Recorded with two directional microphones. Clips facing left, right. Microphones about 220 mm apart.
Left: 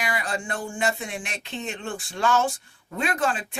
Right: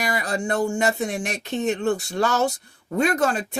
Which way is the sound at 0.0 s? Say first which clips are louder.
Right 4 dB; 40° right (ahead or behind).